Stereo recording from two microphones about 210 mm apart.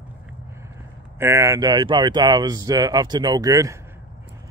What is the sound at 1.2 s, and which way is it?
Speech, 15° right (ahead or behind).